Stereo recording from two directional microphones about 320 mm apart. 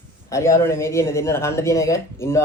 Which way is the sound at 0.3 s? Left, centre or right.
Centre.